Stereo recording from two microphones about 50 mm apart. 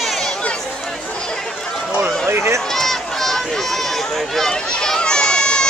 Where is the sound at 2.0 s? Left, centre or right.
Right.